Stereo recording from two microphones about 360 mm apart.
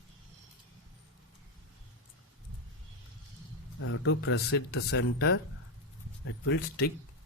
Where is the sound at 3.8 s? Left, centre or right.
Left.